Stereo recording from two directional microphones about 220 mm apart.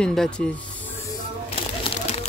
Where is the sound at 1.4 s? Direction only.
25° left (ahead or behind).